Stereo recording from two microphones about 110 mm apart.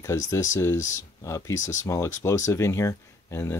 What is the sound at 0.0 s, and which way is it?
Speech, 30° left (ahead or behind).